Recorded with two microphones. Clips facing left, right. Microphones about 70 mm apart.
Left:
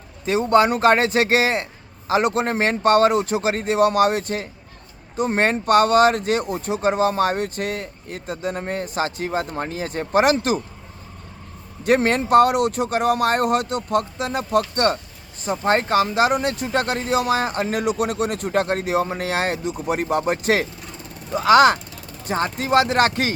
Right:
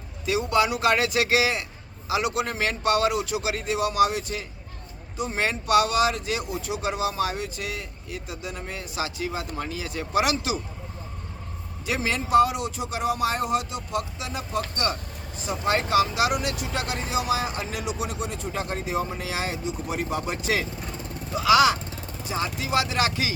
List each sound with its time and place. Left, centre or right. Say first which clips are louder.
0.3 s speech: left 6 dB; left
11.9 s speech: left 7 dB; left
15.4 s speech: left 5 dB; left